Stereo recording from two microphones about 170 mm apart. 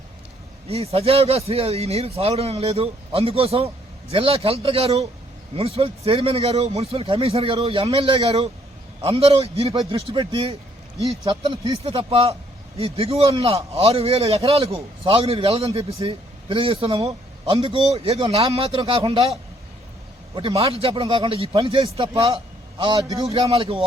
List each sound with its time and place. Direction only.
0.7 s speech: 35° right (ahead or behind)
17.0 s a sound: 20° right (ahead or behind)
17.5 s speech: 35° right (ahead or behind)
20.3 s speech: 35° right (ahead or behind)
22.8 s a man's voice: 25° right (ahead or behind)
23.3 s speech: 35° right (ahead or behind)